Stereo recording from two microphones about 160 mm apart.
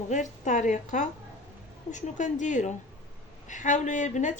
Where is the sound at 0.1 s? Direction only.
50° left (ahead or behind).